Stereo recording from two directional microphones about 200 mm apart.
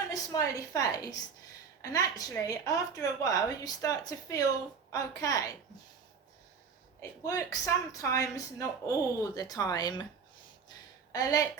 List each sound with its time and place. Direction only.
0.1 s a woman's voice: 15° left (ahead or behind)
7.0 s a woman's voice: 15° left (ahead or behind)
11.1 s a woman's voice: 15° left (ahead or behind)